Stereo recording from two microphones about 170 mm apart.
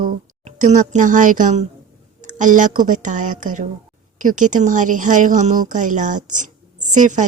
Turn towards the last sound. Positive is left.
turn(degrees=-50)  # may be behind; listen again after turning